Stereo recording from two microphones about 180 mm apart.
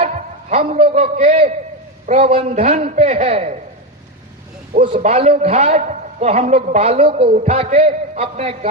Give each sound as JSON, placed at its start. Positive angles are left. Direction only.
{"t": 0.0, "sound": "a man's voice", "side_deg": -35}
{"t": 4.8, "sound": "a man's voice", "side_deg": -35}